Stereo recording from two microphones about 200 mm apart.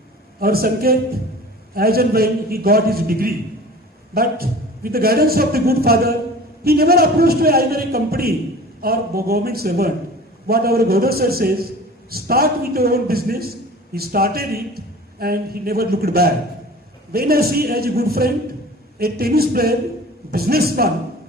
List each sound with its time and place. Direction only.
0.3 s a man's voice: 50° right (ahead or behind)